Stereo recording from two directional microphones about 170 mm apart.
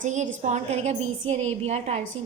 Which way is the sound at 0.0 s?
45° right (ahead or behind).